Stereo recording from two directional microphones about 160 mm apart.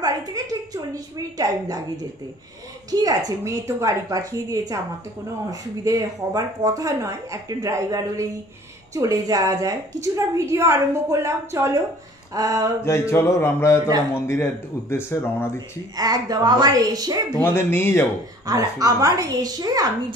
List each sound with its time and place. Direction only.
0.0 s a sound: 25° right (ahead or behind)
2.9 s a woman's voice: 25° right (ahead or behind)
12.8 s speech: 15° left (ahead or behind)
16.0 s a woman's voice: 25° right (ahead or behind)
17.4 s speech: 15° left (ahead or behind)
18.5 s a woman's voice: 20° right (ahead or behind)